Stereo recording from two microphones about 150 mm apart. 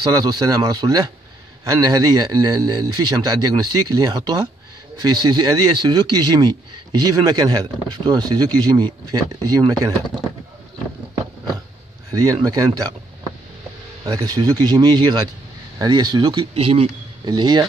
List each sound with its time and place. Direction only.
0.0 s speech: 25° right (ahead or behind)
12.1 s speech: 25° right (ahead or behind)
14.1 s speech: 25° right (ahead or behind)